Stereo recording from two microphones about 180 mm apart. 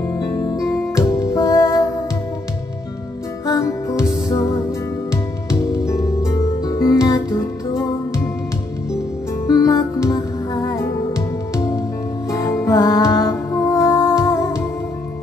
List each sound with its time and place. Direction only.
0.1 s music: 20° left (ahead or behind)
3.4 s music: 15° left (ahead or behind)
9.5 s music: 20° left (ahead or behind)